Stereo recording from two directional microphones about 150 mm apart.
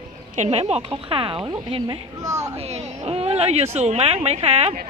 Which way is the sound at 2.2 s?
20° right (ahead or behind).